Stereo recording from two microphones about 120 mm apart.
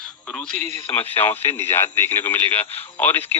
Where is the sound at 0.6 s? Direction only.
20° left (ahead or behind).